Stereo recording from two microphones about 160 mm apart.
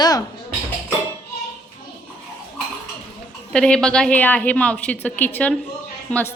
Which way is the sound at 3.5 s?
5° left (ahead or behind).